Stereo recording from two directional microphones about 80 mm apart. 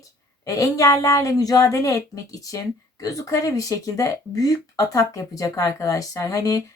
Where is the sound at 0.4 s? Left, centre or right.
Left.